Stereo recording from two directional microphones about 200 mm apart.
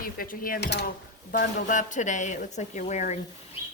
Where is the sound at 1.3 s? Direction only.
40° left (ahead or behind).